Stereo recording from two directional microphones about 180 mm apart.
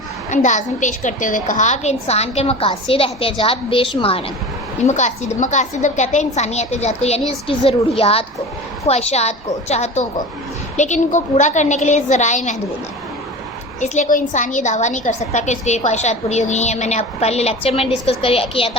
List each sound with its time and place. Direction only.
0.3 s a woman's voice: 40° left (ahead or behind)
4.9 s a woman's voice: 40° left (ahead or behind)
13.8 s a woman's voice: 40° left (ahead or behind)